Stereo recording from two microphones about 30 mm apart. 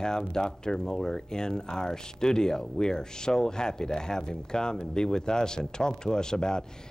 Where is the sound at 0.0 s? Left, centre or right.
Left.